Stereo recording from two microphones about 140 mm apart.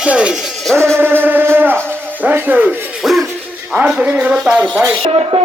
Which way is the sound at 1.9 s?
15° right (ahead or behind).